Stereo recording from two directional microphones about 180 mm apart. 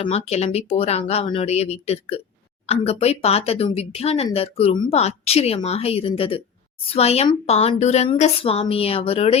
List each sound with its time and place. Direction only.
0.0 s a woman's voice: 35° left (ahead or behind)